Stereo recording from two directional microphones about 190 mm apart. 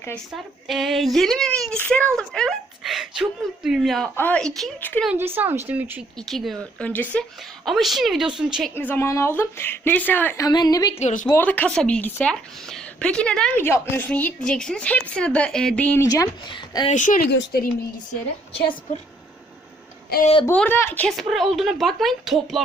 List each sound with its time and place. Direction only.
0.7 s speech: centre (ahead or behind)
5.0 s a woman's voice: 10° right (ahead or behind)
6.1 s speech: centre (ahead or behind)
8.7 s a woman's voice: 10° left (ahead or behind)
11.0 s speech: 40° left (ahead or behind)
11.3 s a woman's voice: 10° left (ahead or behind)
16.0 s speech: 20° left (ahead or behind)
16.9 s speech: 45° left (ahead or behind)
17.2 s speech: 65° left (ahead or behind)
20.5 s speech: 10° left (ahead or behind)